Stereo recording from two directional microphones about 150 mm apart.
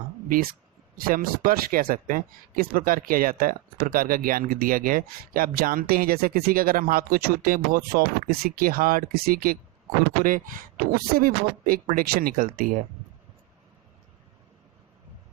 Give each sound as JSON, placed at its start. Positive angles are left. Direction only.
{"t": 0.9, "sound": "speech", "side_deg": -75}
{"t": 10.2, "sound": "speech", "side_deg": -65}